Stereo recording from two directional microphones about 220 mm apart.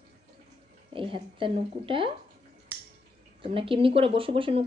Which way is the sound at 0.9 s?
25° right (ahead or behind).